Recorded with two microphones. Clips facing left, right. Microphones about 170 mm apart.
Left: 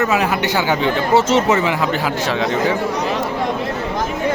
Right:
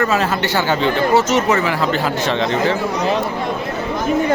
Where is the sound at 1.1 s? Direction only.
25° left (ahead or behind).